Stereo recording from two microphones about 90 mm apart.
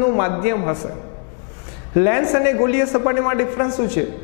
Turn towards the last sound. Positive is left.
turn(degrees=15)  # may be behind; listen again after turning